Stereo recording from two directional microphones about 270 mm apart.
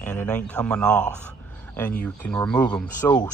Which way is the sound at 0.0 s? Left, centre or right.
Centre.